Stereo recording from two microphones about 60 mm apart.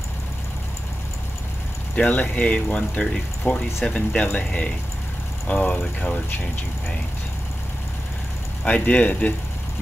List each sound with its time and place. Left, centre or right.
2.0 s speech: left
5.5 s speech: left
8.6 s speech: left